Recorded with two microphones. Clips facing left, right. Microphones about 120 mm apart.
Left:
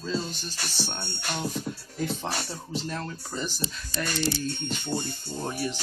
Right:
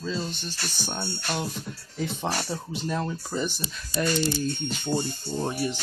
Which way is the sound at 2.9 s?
15° right (ahead or behind).